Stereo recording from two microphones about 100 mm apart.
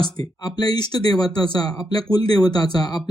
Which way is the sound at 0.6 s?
40° left (ahead or behind).